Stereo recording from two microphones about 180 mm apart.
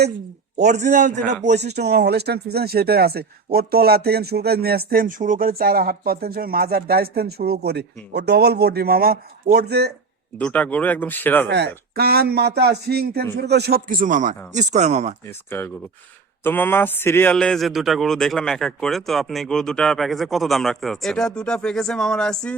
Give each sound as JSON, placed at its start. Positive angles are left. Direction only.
{"t": 0.6, "sound": "a man's voice", "side_deg": -40}
{"t": 1.5, "sound": "speech", "side_deg": -65}
{"t": 10.3, "sound": "speech", "side_deg": 10}
{"t": 11.4, "sound": "speech", "side_deg": -70}
{"t": 15.4, "sound": "a man's voice", "side_deg": 15}